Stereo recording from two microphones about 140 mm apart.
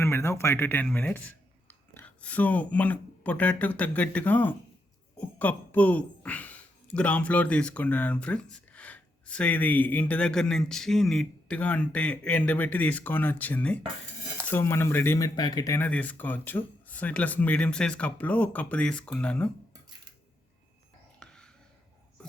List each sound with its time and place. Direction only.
0.0 s speech: 20° left (ahead or behind)
15.4 s speech: 30° left (ahead or behind)
15.8 s speech: 10° left (ahead or behind)
21.2 s a sound: 5° left (ahead or behind)